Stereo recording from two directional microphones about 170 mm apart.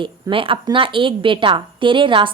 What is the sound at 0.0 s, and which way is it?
A woman's voice, 30° right (ahead or behind).